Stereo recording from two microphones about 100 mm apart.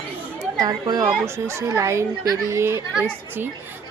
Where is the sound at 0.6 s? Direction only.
35° right (ahead or behind).